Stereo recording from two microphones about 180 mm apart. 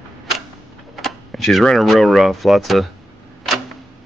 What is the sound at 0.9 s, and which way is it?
Speech, centre (ahead or behind).